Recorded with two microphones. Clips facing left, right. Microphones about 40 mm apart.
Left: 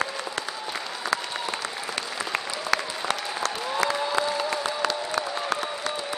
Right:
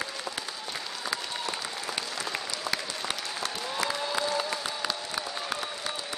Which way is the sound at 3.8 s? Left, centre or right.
Centre.